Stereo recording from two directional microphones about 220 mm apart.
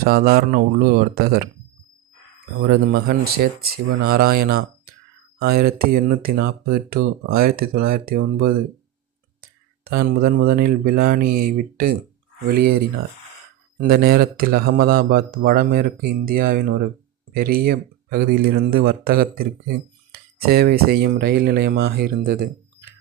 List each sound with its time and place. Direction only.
0.0 s speech: 40° right (ahead or behind)
2.6 s speech: 45° right (ahead or behind)
13.7 s speech: 40° right (ahead or behind)